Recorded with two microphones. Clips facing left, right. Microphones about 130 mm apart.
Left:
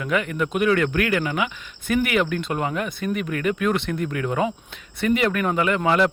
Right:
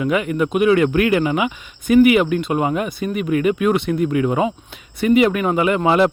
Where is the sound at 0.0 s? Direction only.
10° right (ahead or behind).